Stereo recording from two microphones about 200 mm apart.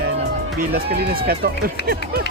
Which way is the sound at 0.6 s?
50° right (ahead or behind).